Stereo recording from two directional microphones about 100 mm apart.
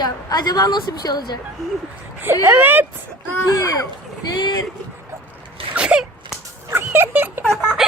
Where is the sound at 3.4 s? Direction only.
35° left (ahead or behind).